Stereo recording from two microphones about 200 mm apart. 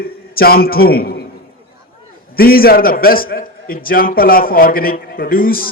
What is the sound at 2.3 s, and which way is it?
A man's voice, 50° left (ahead or behind).